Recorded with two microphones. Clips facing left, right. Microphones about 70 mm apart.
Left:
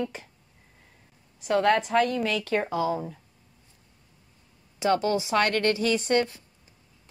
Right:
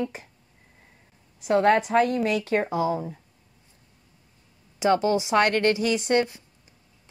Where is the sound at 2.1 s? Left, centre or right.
Centre.